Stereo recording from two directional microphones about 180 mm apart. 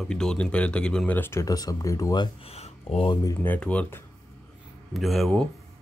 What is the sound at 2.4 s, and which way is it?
Speech, 35° left (ahead or behind).